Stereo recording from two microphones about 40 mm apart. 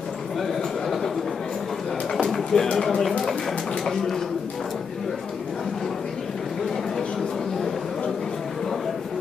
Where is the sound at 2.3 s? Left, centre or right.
Centre.